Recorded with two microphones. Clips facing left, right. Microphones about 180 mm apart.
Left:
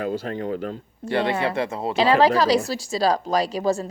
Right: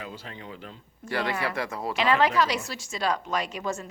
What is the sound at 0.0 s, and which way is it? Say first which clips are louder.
Speech: left 14 dB; 50° left (ahead or behind).